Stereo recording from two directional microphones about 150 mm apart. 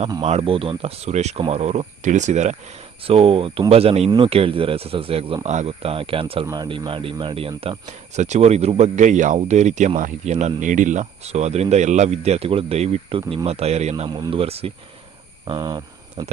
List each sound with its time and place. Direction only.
0.2 s speech: 40° right (ahead or behind)
3.1 s speech: 40° right (ahead or behind)
6.4 s speech: 25° right (ahead or behind)
8.2 s speech: 50° right (ahead or behind)
14.1 s speech: 35° right (ahead or behind)
15.4 s speech: 25° right (ahead or behind)